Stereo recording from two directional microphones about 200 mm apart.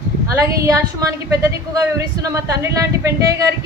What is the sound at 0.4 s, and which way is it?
A woman's voice, 15° right (ahead or behind).